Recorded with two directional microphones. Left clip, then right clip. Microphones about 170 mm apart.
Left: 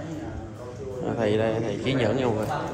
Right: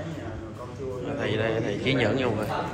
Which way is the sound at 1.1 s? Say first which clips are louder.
Left 3 dB; 25° left (ahead or behind).